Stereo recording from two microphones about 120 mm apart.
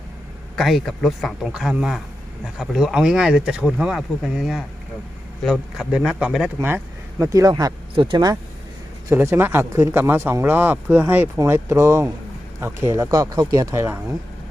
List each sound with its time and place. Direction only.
0.5 s speech: centre (ahead or behind)
6.6 s speech: 20° right (ahead or behind)
7.3 s speech: 30° right (ahead or behind)
7.9 s speech: 45° right (ahead or behind)
9.0 s speech: 20° right (ahead or behind)